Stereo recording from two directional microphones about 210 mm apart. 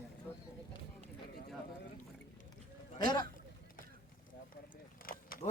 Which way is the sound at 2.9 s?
20° left (ahead or behind).